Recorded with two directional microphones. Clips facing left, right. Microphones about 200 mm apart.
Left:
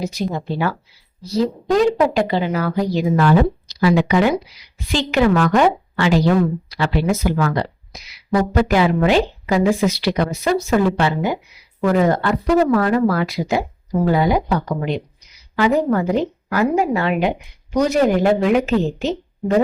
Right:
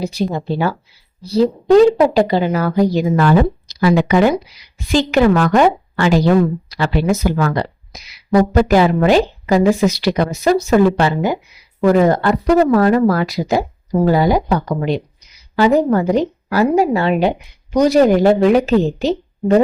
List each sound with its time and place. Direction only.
0.0 s a woman's voice: 30° right (ahead or behind)
8.5 s a woman's voice: 40° right (ahead or behind)
15.5 s a woman's voice: 30° right (ahead or behind)